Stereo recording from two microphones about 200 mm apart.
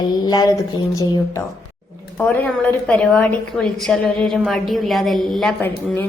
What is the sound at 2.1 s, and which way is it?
A woman's voice, 10° left (ahead or behind).